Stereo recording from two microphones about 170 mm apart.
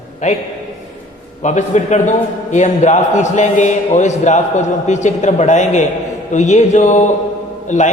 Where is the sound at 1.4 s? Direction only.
45° left (ahead or behind).